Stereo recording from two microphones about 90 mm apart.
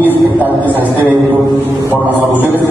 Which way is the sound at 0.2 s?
20° right (ahead or behind).